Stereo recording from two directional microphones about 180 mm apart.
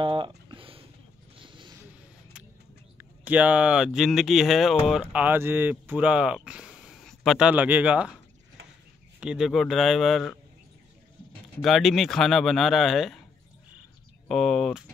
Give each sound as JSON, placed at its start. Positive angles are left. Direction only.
{"t": 0.0, "sound": "a sound", "side_deg": -30}
{"t": 1.3, "sound": "vehicle", "side_deg": -25}
{"t": 3.0, "sound": "speech", "side_deg": -10}
{"t": 9.2, "sound": "speech", "side_deg": -5}
{"t": 11.6, "sound": "speech", "side_deg": 0}
{"t": 14.2, "sound": "speech", "side_deg": 0}